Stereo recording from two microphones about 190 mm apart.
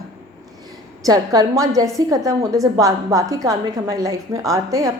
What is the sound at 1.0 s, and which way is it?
Speech, 20° right (ahead or behind).